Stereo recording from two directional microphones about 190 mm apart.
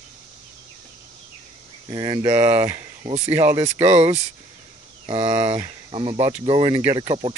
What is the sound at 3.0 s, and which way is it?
Speech, 35° right (ahead or behind).